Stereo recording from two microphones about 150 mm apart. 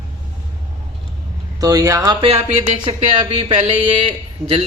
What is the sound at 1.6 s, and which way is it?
Speech, 20° right (ahead or behind).